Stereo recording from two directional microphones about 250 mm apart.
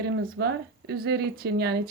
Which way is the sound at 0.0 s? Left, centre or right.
Right.